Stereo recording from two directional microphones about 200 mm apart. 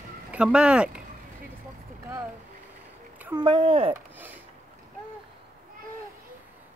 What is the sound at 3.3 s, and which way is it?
Speech, 25° right (ahead or behind).